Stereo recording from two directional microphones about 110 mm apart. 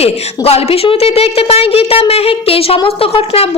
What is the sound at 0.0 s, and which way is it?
A woman's voice, 65° left (ahead or behind).